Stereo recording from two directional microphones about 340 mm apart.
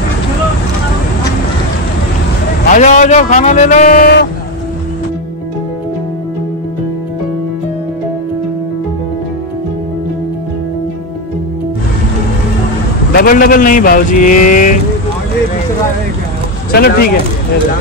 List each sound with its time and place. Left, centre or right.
2.6 s a man's voice: left
13.1 s a man's voice: left
16.7 s a man's voice: left